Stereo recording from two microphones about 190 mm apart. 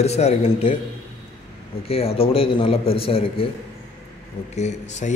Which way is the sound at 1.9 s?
30° left (ahead or behind).